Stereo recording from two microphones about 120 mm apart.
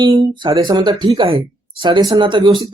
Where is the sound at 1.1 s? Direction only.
55° right (ahead or behind).